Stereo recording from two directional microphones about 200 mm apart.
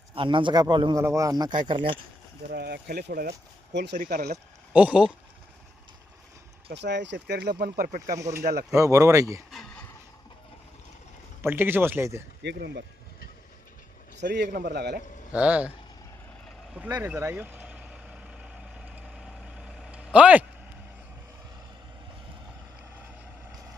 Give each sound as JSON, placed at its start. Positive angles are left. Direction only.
{"t": 0.1, "sound": "speech", "side_deg": -25}
{"t": 2.5, "sound": "speech", "side_deg": -50}
{"t": 3.9, "sound": "speech", "side_deg": -45}
{"t": 4.7, "sound": "speech", "side_deg": -5}
{"t": 6.7, "sound": "speech", "side_deg": -60}
{"t": 8.1, "sound": "speech", "side_deg": -15}
{"t": 9.5, "sound": "a sound", "side_deg": 0}
{"t": 11.4, "sound": "speech", "side_deg": -10}
{"t": 12.4, "sound": "speech", "side_deg": -60}
{"t": 14.2, "sound": "a man's voice", "side_deg": -55}
{"t": 15.3, "sound": "speech", "side_deg": -5}
{"t": 17.1, "sound": "vehicle", "side_deg": -10}